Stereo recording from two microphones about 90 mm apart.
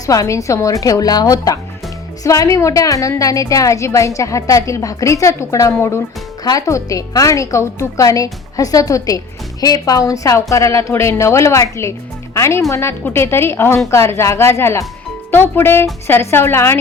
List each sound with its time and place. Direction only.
0.0 s a woman's voice: 40° left (ahead or behind)